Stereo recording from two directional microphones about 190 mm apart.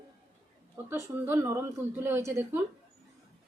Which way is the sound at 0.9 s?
15° right (ahead or behind).